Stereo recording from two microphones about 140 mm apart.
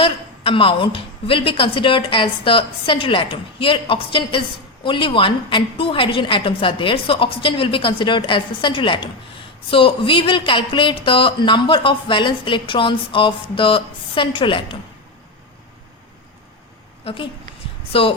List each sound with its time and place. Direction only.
0.0 s a woman's voice: 40° left (ahead or behind)
17.0 s a woman's voice: 45° left (ahead or behind)